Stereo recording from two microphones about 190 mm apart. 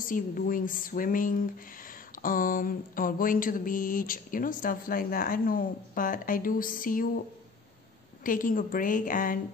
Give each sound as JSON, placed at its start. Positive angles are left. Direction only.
{"t": 0.0, "sound": "speech", "side_deg": 45}
{"t": 8.2, "sound": "speech", "side_deg": 45}